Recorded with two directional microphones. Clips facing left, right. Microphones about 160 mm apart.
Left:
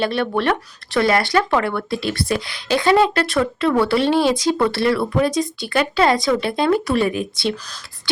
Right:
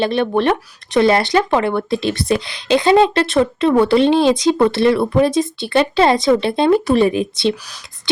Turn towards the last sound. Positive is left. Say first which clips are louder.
# right 5 dB
turn(degrees=-25)  # may be behind; listen again after turning